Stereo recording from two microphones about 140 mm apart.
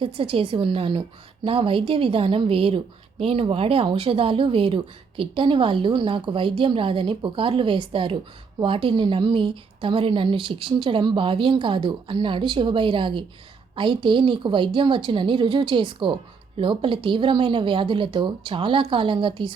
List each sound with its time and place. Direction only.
0.0 s a woman's voice: 40° right (ahead or behind)